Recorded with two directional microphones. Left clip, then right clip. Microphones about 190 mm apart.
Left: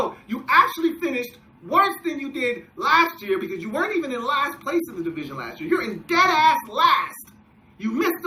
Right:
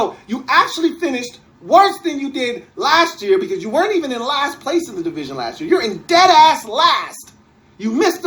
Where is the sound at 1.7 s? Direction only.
50° left (ahead or behind).